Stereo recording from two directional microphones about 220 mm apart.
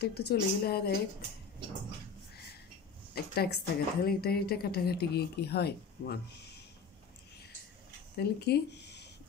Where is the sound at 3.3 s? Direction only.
45° left (ahead or behind).